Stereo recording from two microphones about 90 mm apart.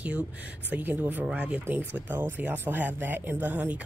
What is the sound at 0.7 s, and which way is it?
Speech, 20° right (ahead or behind).